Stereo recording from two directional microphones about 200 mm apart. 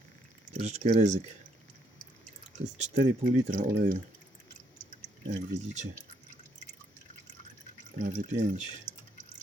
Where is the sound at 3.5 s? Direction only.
40° right (ahead or behind).